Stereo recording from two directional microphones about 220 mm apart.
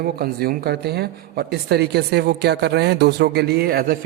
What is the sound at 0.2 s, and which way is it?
Speech, 45° right (ahead or behind).